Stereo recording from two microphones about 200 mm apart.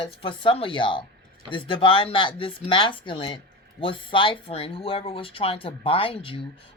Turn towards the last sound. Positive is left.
turn(degrees=25)  # may be behind; listen again after turning